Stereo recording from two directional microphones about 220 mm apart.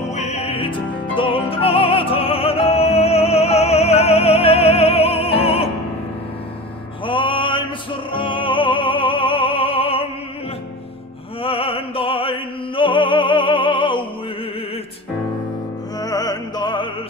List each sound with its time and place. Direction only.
0.1 s music: 30° left (ahead or behind)
7.1 s music: 20° left (ahead or behind)
11.4 s opera: 25° left (ahead or behind)
16.0 s music: 15° left (ahead or behind)